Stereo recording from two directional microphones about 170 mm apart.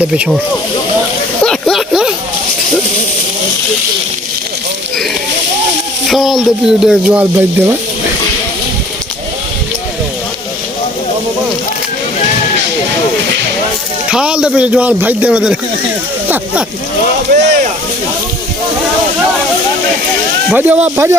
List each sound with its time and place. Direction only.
0.1 s speech: 5° right (ahead or behind)
1.5 s a sound: centre (ahead or behind)
6.1 s speech: centre (ahead or behind)
14.1 s speech: 5° right (ahead or behind)
17.3 s a sound: 45° right (ahead or behind)
20.5 s speech: 10° right (ahead or behind)